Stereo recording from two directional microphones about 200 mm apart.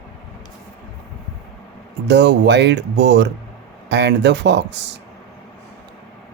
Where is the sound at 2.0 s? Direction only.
60° right (ahead or behind).